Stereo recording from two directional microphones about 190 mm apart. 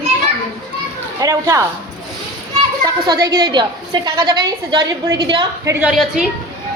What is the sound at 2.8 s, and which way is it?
A woman's voice, 20° right (ahead or behind).